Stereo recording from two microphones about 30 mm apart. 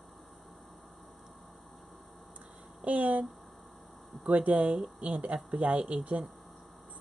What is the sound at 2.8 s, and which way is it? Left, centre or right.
Speech, right.